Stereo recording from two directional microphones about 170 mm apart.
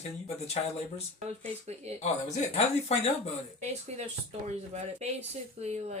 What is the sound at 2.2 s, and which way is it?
Speech, 40° left (ahead or behind).